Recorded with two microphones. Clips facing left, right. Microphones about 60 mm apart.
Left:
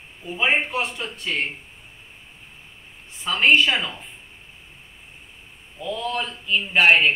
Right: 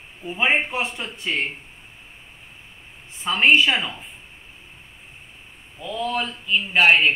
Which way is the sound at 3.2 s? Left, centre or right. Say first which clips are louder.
Right 1 dB; centre.